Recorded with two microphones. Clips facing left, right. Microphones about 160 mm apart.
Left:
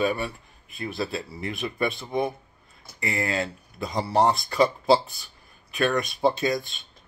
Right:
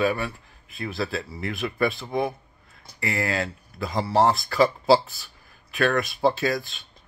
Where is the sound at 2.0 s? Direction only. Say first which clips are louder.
Even; centre (ahead or behind).